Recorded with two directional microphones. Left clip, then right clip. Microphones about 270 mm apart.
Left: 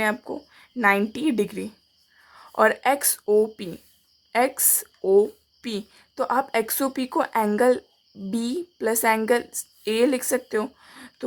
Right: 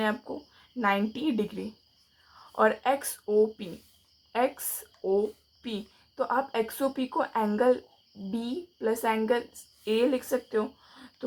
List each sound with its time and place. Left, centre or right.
0.0 s a woman's voice: left